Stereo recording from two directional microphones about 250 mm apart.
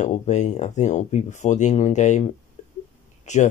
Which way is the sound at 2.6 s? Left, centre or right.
Left.